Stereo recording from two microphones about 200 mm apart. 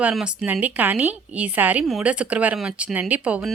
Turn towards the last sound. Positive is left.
turn(degrees=-5)  # may be behind; listen again after turning